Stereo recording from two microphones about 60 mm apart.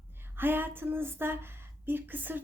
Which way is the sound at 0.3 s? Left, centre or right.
Right.